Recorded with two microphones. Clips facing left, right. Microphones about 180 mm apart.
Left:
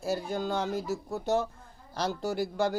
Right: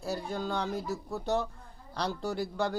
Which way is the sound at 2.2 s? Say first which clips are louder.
Left 4 dB; 5° left (ahead or behind).